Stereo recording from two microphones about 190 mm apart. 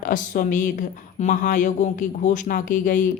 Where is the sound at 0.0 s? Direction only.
45° left (ahead or behind).